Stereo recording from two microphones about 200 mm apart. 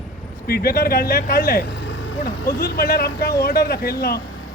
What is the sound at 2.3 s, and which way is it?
A man's voice, 50° left (ahead or behind).